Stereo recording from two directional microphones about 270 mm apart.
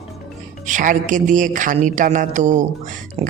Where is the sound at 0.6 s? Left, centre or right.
Right.